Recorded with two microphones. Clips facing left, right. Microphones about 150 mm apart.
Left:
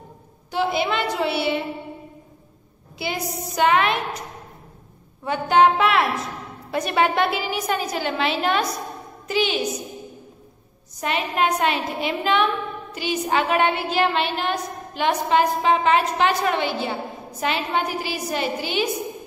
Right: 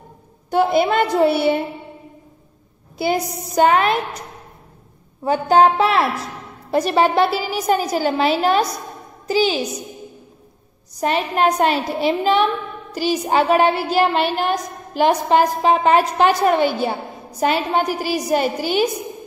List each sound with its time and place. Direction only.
0.5 s a woman's voice: 45° right (ahead or behind)
3.0 s a woman's voice: 45° right (ahead or behind)
5.2 s a woman's voice: 35° right (ahead or behind)
11.0 s a woman's voice: 35° right (ahead or behind)